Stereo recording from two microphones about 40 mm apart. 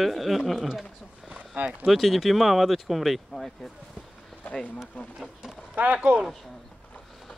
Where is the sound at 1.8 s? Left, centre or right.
Centre.